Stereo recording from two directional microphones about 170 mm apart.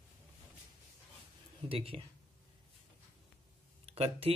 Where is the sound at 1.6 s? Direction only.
35° right (ahead or behind).